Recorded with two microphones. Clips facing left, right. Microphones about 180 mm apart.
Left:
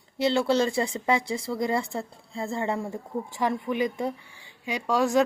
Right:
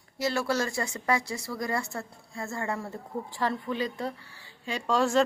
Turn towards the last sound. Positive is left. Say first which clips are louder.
# left 2 dB
turn(degrees=15)  # may be behind; listen again after turning